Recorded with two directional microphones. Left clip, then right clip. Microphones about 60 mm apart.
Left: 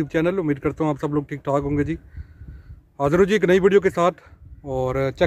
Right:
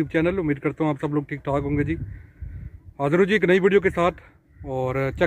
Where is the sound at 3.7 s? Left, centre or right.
Centre.